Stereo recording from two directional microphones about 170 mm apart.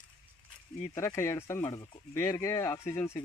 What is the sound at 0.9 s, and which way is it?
Speech, 15° left (ahead or behind).